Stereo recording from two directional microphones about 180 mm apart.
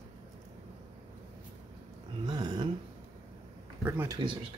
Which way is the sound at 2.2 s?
25° right (ahead or behind).